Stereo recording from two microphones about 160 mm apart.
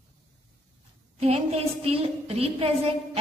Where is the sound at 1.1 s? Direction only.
40° right (ahead or behind).